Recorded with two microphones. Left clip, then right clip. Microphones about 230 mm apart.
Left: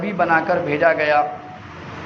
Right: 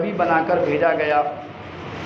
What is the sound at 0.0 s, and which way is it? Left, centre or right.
A man's voice, left.